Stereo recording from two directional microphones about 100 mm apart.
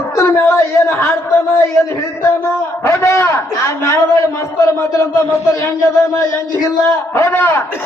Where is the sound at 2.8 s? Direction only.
25° left (ahead or behind).